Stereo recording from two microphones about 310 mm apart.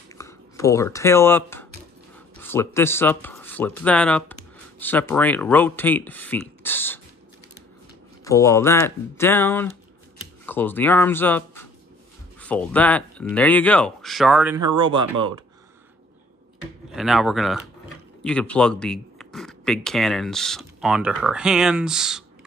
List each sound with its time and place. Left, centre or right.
0.1 s speech: centre
8.2 s speech: centre
16.9 s speech: centre